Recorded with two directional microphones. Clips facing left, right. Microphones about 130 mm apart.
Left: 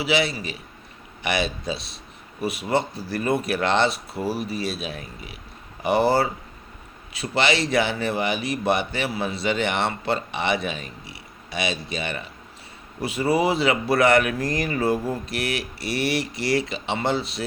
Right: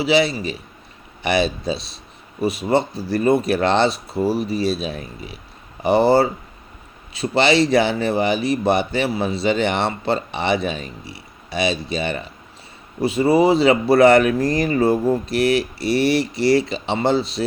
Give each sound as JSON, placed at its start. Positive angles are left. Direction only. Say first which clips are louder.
{"t": 0.0, "sound": "speech", "louder": "right 6 dB", "side_deg": -30}